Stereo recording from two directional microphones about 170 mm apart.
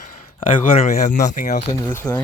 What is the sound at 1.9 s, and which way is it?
Speech, 10° left (ahead or behind).